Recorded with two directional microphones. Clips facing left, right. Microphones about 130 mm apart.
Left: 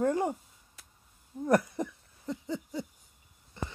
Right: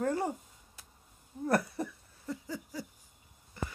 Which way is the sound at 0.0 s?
15° left (ahead or behind).